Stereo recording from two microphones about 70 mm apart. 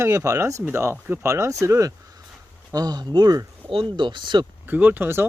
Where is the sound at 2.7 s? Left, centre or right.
Right.